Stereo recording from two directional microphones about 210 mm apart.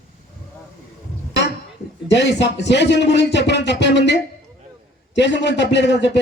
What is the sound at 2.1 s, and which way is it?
A man's voice, 55° left (ahead or behind).